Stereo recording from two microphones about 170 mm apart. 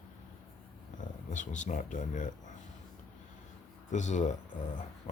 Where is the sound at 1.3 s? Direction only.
45° left (ahead or behind).